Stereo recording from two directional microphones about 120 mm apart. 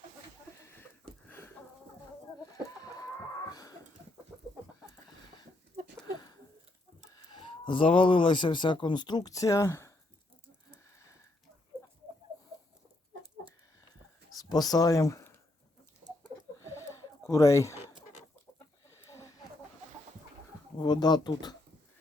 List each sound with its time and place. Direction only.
1.3 s a sound: 20° left (ahead or behind)
7.1 s speech: 35° left (ahead or behind)
14.3 s speech: 30° left (ahead or behind)
16.7 s chicken: 25° left (ahead or behind)
19.0 s a sound: 25° left (ahead or behind)
20.7 s speech: 35° left (ahead or behind)